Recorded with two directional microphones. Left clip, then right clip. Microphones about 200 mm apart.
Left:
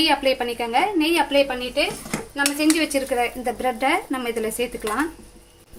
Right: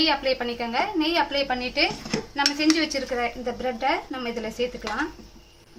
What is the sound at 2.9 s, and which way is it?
A woman's voice, 30° left (ahead or behind).